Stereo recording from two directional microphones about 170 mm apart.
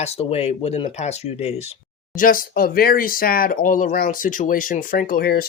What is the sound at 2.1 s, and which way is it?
Speech, 55° left (ahead or behind).